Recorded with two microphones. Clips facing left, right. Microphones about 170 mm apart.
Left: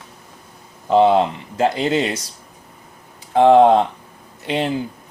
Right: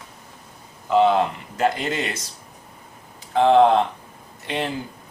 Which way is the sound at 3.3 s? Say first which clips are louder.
Left 4 dB; 40° left (ahead or behind).